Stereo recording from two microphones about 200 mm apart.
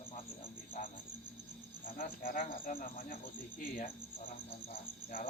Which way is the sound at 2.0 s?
45° left (ahead or behind).